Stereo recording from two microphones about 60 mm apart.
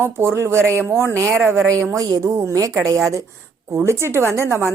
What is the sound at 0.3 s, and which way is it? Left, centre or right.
A woman's voice, right.